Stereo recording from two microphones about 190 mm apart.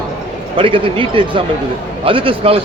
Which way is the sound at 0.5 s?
25° right (ahead or behind).